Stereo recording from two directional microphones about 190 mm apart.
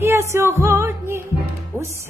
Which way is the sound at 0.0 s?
15° right (ahead or behind).